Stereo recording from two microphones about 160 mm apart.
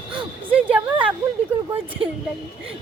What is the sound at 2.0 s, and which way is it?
Speech, 35° right (ahead or behind).